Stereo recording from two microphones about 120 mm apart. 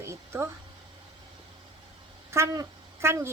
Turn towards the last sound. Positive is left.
turn(degrees=-20)  # may be behind; listen again after turning